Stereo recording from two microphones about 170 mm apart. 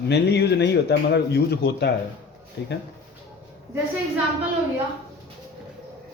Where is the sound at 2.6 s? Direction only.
90° left.